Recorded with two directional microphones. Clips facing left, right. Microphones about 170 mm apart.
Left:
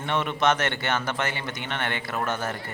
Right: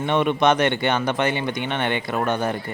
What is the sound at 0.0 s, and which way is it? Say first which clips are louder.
Speech: right 6 dB; 15° right (ahead or behind).